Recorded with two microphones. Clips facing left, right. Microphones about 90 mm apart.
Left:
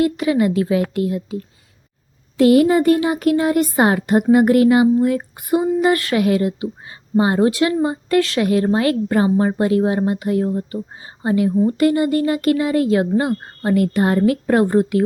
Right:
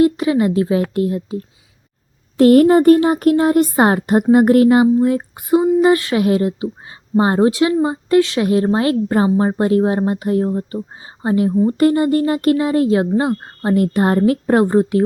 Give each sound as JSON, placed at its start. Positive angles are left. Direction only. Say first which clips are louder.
{"t": 0.0, "sound": "speech", "louder": "right 3 dB", "side_deg": -30}
{"t": 2.4, "sound": "speech", "louder": "right 3 dB", "side_deg": -45}